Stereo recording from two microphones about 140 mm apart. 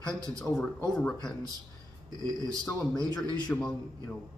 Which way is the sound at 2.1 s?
25° right (ahead or behind).